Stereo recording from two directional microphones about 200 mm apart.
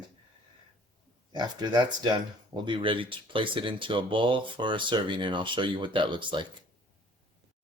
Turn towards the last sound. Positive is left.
turn(degrees=-25)  # may be behind; listen again after turning